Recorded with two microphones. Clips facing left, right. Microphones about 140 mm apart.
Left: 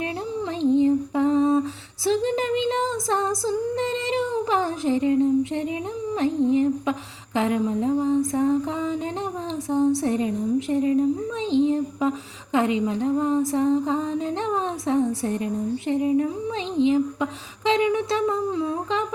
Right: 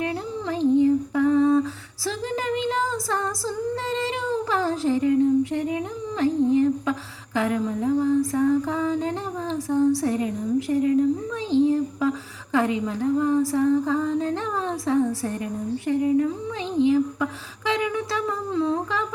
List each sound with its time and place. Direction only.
0.0 s humming: 20° left (ahead or behind)
2.0 s female singing: 20° left (ahead or behind)
6.5 s a woman's voice: 20° left (ahead or behind)